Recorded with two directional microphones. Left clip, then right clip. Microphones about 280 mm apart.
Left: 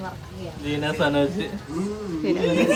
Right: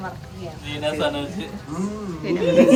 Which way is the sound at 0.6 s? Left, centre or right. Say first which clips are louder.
Even; left.